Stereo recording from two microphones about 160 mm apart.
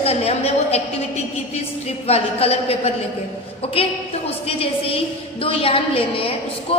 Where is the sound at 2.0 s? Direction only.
40° left (ahead or behind).